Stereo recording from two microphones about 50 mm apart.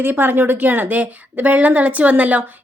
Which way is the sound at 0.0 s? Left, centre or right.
Right.